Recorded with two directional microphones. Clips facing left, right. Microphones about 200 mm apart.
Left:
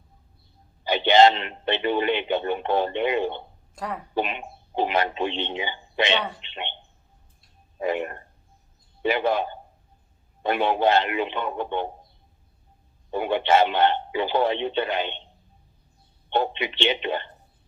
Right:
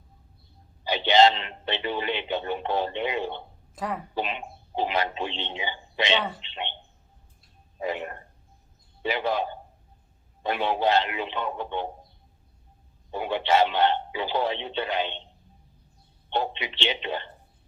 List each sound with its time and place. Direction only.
0.9 s speech: 55° left (ahead or behind)
3.8 s speech: centre (ahead or behind)
4.1 s a man's voice: 55° left (ahead or behind)
6.1 s speech: centre (ahead or behind)
6.4 s a sound: 55° left (ahead or behind)
7.8 s a man's voice: 55° left (ahead or behind)
13.1 s speech: 55° left (ahead or behind)
16.3 s speech: 55° left (ahead or behind)